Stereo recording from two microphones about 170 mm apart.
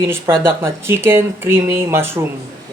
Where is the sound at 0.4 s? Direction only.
15° right (ahead or behind).